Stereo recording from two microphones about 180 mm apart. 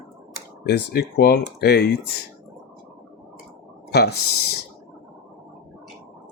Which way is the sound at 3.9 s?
65° left (ahead or behind).